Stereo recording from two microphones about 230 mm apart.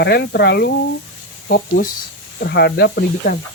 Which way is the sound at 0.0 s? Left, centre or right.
Left.